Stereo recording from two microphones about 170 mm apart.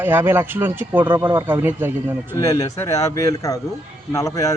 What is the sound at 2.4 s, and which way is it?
A man's voice, 20° left (ahead or behind).